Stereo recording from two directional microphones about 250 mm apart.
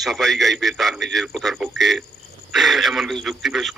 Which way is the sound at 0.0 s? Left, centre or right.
Centre.